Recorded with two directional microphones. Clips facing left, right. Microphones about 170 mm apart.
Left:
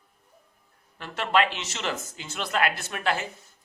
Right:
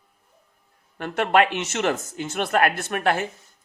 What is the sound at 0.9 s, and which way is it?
Speech, 55° right (ahead or behind).